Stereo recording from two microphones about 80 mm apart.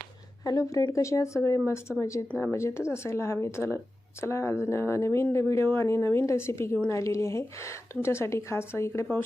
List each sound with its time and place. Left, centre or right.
0.9 s speech: left